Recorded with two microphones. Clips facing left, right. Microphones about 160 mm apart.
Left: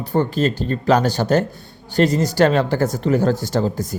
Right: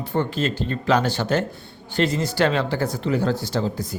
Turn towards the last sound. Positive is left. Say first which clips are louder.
# left 4 dB
turn(degrees=45)  # may be behind; listen again after turning